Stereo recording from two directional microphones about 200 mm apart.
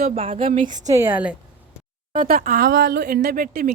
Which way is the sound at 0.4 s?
40° right (ahead or behind).